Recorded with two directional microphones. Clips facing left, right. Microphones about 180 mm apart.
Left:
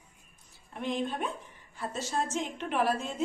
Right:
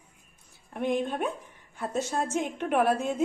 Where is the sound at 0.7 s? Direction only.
55° right (ahead or behind).